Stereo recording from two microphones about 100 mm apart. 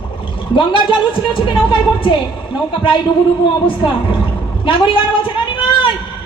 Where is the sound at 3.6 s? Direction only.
60° left (ahead or behind).